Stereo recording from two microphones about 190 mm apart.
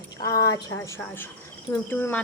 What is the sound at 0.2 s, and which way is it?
Speech, 20° left (ahead or behind).